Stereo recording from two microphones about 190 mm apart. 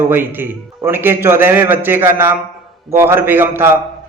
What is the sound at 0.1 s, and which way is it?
A man's voice, 10° right (ahead or behind).